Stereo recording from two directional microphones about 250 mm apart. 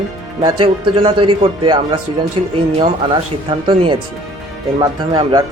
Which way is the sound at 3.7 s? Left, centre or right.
Centre.